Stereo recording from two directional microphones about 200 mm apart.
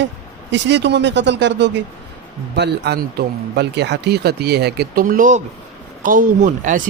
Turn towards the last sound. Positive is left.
turn(degrees=-40)  # may be behind; listen again after turning